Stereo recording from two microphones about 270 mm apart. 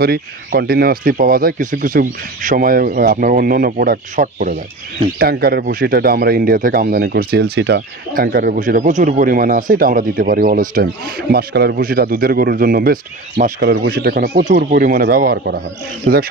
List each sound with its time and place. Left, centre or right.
0.0 s speech: right